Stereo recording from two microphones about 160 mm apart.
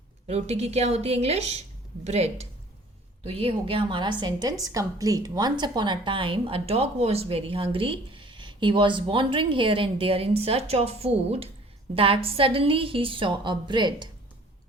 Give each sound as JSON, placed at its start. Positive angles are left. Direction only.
{"t": 0.3, "sound": "a woman's voice", "side_deg": -40}